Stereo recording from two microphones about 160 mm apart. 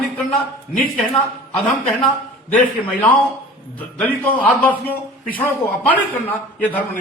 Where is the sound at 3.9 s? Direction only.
10° left (ahead or behind).